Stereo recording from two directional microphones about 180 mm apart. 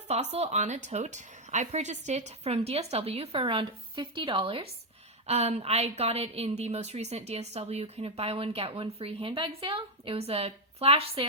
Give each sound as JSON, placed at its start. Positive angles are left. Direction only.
{"t": 0.1, "sound": "a woman's voice", "side_deg": -35}